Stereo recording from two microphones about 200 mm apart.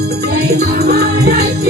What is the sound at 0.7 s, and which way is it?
Music, 50° right (ahead or behind).